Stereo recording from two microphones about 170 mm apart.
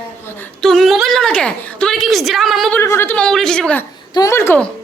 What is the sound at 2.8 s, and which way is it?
Speech, 15° left (ahead or behind).